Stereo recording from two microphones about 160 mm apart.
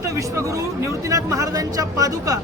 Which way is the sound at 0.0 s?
20° right (ahead or behind).